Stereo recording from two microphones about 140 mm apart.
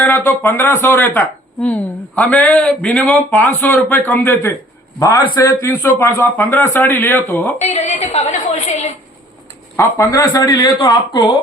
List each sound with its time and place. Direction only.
0.3 s speech: 15° left (ahead or behind)
7.6 s a woman's voice: 50° left (ahead or behind)
9.7 s speech: 25° left (ahead or behind)